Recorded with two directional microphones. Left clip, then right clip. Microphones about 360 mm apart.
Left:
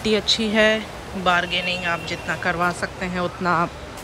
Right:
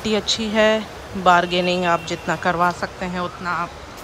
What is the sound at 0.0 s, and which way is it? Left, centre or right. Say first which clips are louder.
Speech: left 1 dB; centre.